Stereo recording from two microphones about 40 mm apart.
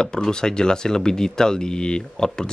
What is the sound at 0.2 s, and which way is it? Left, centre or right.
Speech, centre.